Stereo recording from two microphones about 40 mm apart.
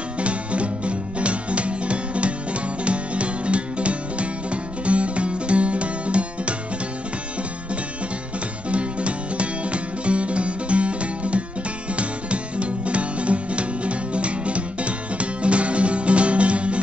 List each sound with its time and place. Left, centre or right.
0.2 s music: right
8.6 s music: right